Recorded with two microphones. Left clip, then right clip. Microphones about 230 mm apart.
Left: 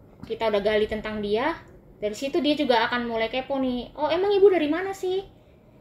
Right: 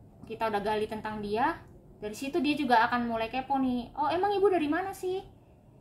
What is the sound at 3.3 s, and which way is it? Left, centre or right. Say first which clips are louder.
A woman's voice: left 3 dB; centre.